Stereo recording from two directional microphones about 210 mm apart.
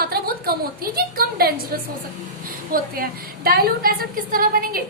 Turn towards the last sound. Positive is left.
turn(degrees=-45)  # may be behind; listen again after turning